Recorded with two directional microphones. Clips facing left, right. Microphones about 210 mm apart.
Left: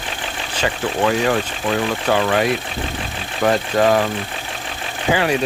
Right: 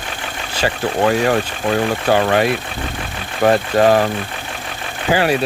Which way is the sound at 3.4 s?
35° right (ahead or behind).